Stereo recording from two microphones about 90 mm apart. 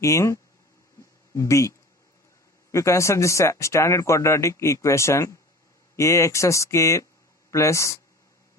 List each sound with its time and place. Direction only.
0.0 s speech: 35° left (ahead or behind)